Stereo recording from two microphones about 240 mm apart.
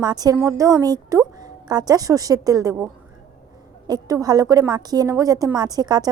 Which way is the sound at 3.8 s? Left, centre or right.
Centre.